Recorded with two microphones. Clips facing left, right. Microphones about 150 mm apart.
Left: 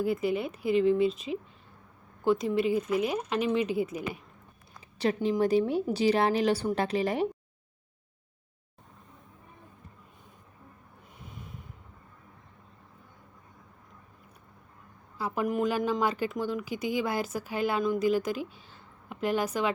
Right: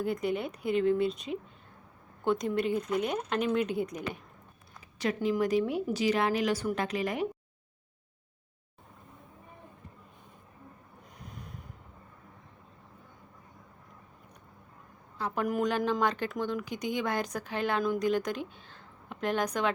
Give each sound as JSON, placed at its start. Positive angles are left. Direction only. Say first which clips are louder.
{"t": 0.0, "sound": "speech", "louder": "left 3 dB", "side_deg": 5}
{"t": 4.9, "sound": "a woman's voice", "louder": "left 2 dB", "side_deg": 30}
{"t": 11.2, "sound": "snort", "louder": "even", "side_deg": 0}
{"t": 15.2, "sound": "speech", "louder": "left 1 dB", "side_deg": 0}